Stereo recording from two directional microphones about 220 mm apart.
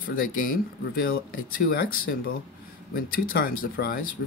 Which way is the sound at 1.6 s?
40° left (ahead or behind).